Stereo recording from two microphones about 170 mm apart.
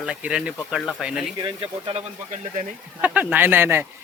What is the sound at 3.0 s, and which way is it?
Speech, 10° right (ahead or behind).